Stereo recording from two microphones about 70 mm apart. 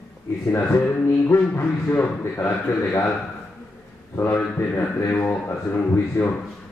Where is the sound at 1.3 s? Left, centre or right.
Left.